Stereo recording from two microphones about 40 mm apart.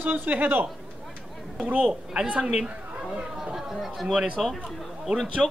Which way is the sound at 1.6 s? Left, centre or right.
Right.